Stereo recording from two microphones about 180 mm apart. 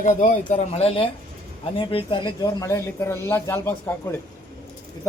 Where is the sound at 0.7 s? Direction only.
30° left (ahead or behind).